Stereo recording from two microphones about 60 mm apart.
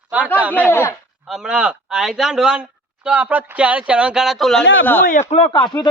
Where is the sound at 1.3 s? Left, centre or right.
Centre.